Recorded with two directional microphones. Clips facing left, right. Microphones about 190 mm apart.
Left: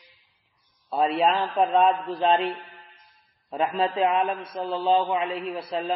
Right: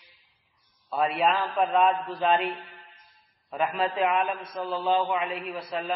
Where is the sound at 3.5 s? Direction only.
30° left (ahead or behind).